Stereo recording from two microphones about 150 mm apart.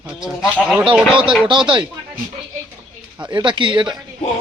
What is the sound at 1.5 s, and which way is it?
Speech, 30° right (ahead or behind).